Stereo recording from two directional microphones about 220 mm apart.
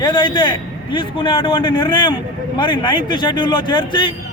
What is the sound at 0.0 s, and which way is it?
A man's voice, 20° left (ahead or behind).